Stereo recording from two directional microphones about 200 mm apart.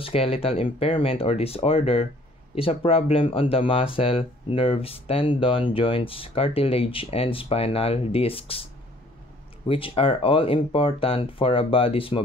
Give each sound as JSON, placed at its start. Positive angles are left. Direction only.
{"t": 0.0, "sound": "speech", "side_deg": 30}
{"t": 9.7, "sound": "speech", "side_deg": 25}